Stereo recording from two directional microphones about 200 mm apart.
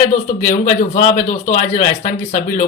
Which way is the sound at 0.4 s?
40° left (ahead or behind).